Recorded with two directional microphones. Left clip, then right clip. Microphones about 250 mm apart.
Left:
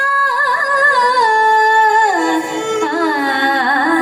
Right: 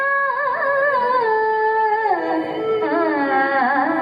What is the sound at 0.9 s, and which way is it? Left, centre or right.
Music, left.